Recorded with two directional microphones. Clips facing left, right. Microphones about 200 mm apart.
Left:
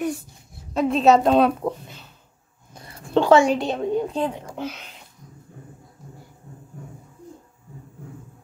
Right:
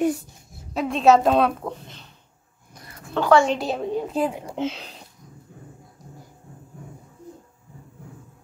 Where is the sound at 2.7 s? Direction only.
25° left (ahead or behind).